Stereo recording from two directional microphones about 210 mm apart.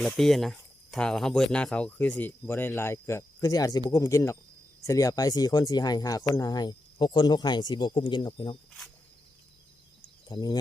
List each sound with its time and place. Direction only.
0.0 s speech: centre (ahead or behind); by 8.5 s 25° left (ahead or behind)
10.2 s speech: 20° left (ahead or behind)